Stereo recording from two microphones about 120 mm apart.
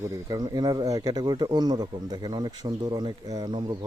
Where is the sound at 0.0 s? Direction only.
30° right (ahead or behind).